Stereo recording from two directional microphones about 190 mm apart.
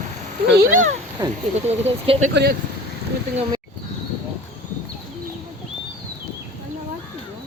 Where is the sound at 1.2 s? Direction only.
20° right (ahead or behind).